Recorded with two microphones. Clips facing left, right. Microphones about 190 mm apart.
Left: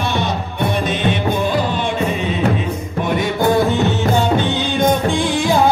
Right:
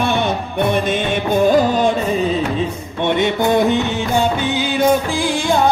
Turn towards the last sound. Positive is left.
turn(degrees=0)  # may be behind; listen again after turning